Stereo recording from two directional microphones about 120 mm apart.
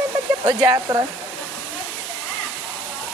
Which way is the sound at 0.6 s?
25° right (ahead or behind).